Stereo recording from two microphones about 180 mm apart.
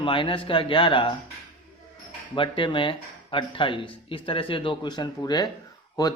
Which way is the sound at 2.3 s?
25° left (ahead or behind).